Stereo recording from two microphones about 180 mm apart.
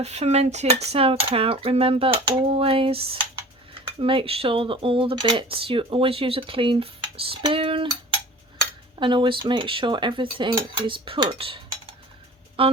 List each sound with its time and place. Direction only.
0.0 s cutlery: 35° right (ahead or behind)
4.0 s speech: 30° right (ahead or behind)
12.6 s cutlery: 30° right (ahead or behind)